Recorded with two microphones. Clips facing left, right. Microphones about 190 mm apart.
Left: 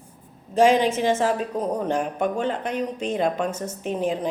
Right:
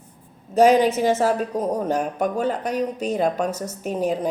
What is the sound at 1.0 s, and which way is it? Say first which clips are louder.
Speech: right 2 dB; 5° right (ahead or behind).